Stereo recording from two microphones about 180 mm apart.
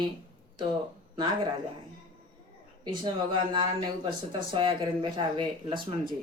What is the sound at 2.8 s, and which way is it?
Speech, 25° right (ahead or behind).